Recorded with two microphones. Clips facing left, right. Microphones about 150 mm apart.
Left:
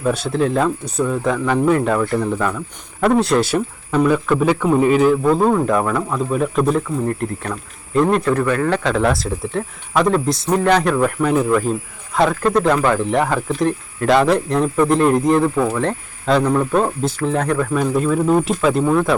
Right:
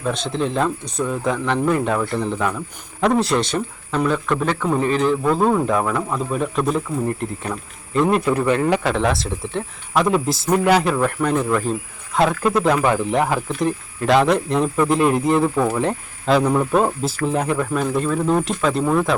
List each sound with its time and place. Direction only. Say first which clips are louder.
0.0 s speech: left 4 dB; 10° left (ahead or behind)
8.2 s speech: left 1 dB; 15° right (ahead or behind)
9.0 s speech: left 3 dB; centre (ahead or behind)